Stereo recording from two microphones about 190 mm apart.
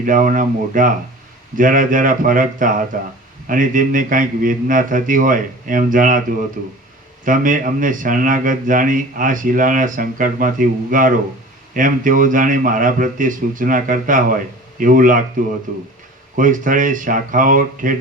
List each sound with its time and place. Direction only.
0.0 s speech: 45° right (ahead or behind)